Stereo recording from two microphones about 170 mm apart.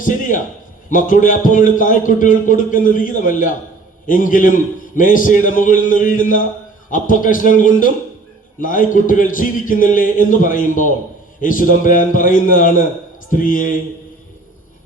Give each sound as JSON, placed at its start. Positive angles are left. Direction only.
{"t": 0.0, "sound": "a man's voice", "side_deg": 50}